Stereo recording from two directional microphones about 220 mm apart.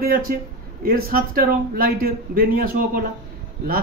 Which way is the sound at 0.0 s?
40° right (ahead or behind).